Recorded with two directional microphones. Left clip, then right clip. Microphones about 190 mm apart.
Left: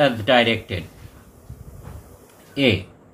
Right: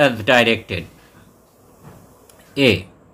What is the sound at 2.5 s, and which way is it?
Speech, 35° right (ahead or behind).